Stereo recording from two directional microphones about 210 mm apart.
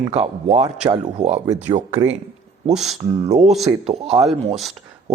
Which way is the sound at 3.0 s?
25° right (ahead or behind).